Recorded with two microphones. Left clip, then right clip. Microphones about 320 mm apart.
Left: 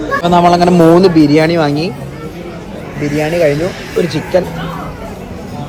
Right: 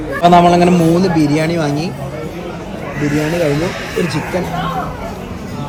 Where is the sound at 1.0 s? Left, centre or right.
Centre.